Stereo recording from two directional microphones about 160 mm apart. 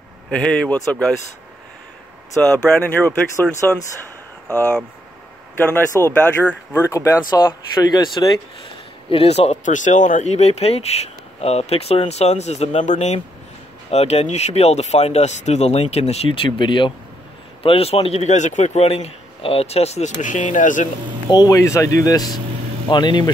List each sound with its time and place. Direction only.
0.3 s speech: 5° left (ahead or behind)
2.4 s speech: 10° left (ahead or behind)
5.7 s a man's voice: 15° left (ahead or behind); by 20.9 s 50° left (ahead or behind)
21.3 s speech: 25° left (ahead or behind)